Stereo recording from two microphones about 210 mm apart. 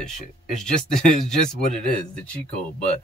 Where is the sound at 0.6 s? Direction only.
5° left (ahead or behind).